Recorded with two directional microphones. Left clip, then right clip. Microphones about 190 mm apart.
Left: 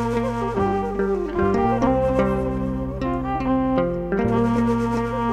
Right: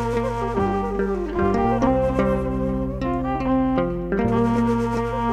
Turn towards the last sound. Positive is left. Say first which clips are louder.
# even
turn(degrees=0)  # may be behind; listen again after turning